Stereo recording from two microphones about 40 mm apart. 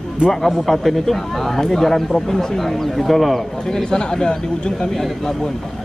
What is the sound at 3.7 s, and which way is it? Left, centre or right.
A man's voice, centre.